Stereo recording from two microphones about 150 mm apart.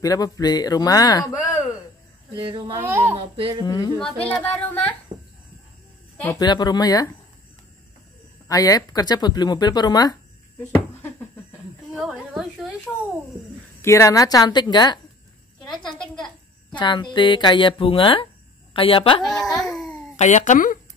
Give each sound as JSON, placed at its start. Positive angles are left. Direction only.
{"t": 0.0, "sound": "speech", "side_deg": 25}
{"t": 2.3, "sound": "speech", "side_deg": -35}
{"t": 2.8, "sound": "a woman's voice", "side_deg": -15}
{"t": 3.2, "sound": "speech", "side_deg": -35}
{"t": 3.6, "sound": "speech", "side_deg": 25}
{"t": 4.0, "sound": "speech", "side_deg": 10}
{"t": 6.4, "sound": "speech", "side_deg": 30}
{"t": 8.5, "sound": "speech", "side_deg": 25}
{"t": 12.0, "sound": "a sound", "side_deg": 0}
{"t": 13.7, "sound": "speech", "side_deg": 20}
{"t": 15.9, "sound": "a sound", "side_deg": 5}
{"t": 16.7, "sound": "speech", "side_deg": 30}
{"t": 19.2, "sound": "a sound", "side_deg": 0}
{"t": 20.2, "sound": "speech", "side_deg": 50}